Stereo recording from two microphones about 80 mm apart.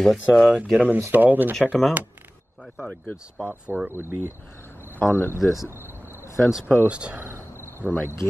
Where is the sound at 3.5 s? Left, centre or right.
Centre.